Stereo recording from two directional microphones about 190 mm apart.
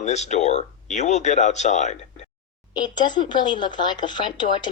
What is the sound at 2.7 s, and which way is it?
Speech, 25° left (ahead or behind).